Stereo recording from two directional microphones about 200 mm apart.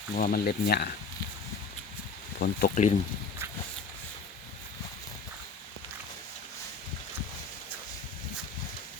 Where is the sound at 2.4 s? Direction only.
50° left (ahead or behind).